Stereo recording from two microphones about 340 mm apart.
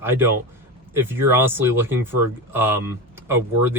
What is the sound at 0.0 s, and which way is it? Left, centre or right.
Speech, centre.